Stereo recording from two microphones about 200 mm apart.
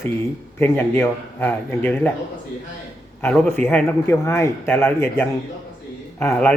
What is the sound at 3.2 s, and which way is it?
Speech, 10° left (ahead or behind).